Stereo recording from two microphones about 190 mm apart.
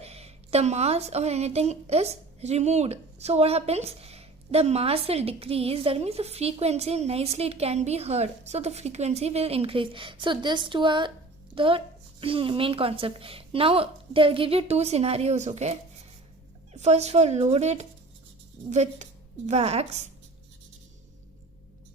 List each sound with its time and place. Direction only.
0.0 s a woman's voice: 35° right (ahead or behind)